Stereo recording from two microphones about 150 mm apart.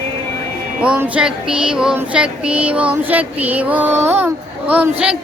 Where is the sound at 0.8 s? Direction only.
10° right (ahead or behind).